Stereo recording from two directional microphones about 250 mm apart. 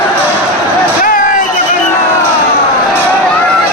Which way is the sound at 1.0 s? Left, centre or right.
Left.